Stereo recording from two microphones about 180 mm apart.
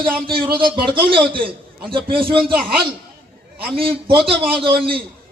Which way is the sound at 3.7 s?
30° right (ahead or behind).